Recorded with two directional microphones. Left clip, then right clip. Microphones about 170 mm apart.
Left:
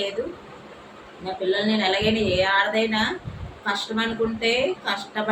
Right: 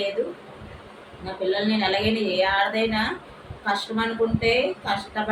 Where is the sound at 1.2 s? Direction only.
5° left (ahead or behind).